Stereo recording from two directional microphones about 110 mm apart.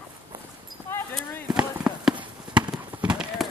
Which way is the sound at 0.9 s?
20° left (ahead or behind).